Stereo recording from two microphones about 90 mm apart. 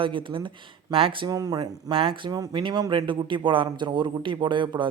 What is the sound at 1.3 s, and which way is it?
Speech, 45° right (ahead or behind).